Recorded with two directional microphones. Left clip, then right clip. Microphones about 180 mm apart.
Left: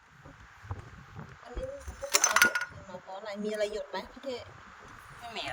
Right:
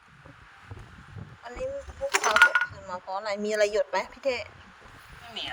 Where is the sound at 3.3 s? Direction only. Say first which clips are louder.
Right 8 dB; 20° right (ahead or behind).